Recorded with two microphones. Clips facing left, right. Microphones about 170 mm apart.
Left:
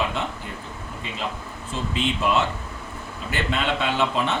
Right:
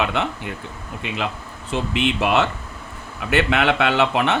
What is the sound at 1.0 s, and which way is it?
Speech, 70° right (ahead or behind).